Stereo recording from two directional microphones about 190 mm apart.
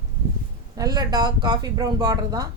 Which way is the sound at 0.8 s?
20° right (ahead or behind).